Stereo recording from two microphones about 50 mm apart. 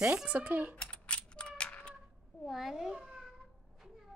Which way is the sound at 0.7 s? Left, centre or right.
Left.